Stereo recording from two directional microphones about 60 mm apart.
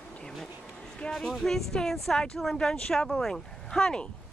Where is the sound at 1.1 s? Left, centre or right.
Centre.